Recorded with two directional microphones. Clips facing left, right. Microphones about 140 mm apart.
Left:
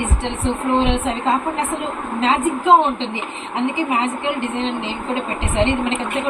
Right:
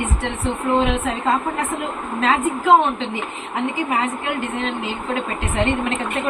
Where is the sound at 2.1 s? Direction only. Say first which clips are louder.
Left 1 dB; 20° left (ahead or behind).